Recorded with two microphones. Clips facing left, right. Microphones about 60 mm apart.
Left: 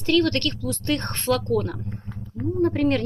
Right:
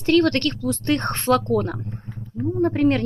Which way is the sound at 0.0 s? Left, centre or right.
Right.